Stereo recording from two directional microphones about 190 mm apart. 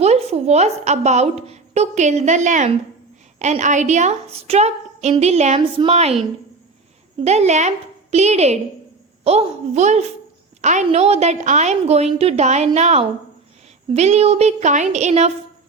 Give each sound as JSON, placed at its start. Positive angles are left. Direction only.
{"t": 0.0, "sound": "a woman's voice", "side_deg": -35}
{"t": 7.3, "sound": "a woman's voice", "side_deg": -35}